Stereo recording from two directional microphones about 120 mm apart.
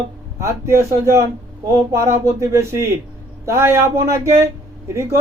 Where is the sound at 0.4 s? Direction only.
25° right (ahead or behind).